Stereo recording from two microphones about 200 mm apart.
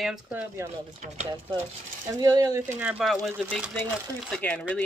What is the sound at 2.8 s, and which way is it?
Speech, 5° right (ahead or behind).